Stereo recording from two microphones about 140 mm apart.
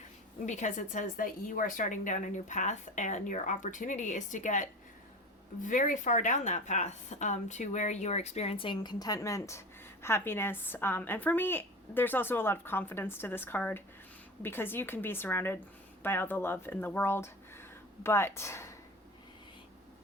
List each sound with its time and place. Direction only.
0.4 s a woman's voice: 60° left (ahead or behind); by 18.7 s 20° left (ahead or behind)